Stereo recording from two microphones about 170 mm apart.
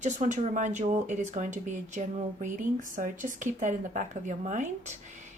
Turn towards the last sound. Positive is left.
turn(degrees=-45)  # may be behind; listen again after turning